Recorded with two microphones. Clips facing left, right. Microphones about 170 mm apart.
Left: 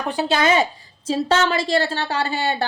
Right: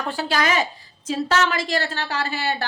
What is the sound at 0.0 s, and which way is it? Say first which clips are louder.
A woman's voice: left 4 dB; 20° left (ahead or behind).